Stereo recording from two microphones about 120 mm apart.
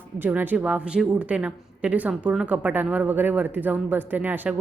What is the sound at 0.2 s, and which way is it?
Speech, 15° right (ahead or behind).